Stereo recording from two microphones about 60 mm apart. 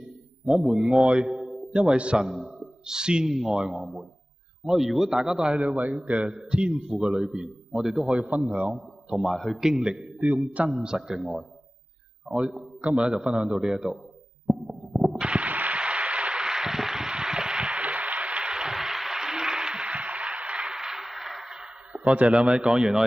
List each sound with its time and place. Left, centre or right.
0.5 s a man's voice: centre
5.9 s a man's voice: centre
7.7 s a man's voice: centre
14.5 s heart murmur: centre
15.1 s a sound: centre